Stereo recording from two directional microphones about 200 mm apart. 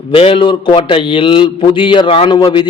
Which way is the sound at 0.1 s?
25° left (ahead or behind).